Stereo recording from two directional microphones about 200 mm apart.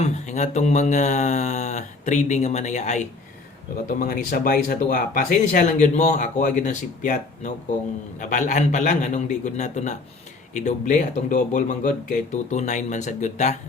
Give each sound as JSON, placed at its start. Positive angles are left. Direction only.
{"t": 0.0, "sound": "speech", "side_deg": 35}
{"t": 3.8, "sound": "speech", "side_deg": 45}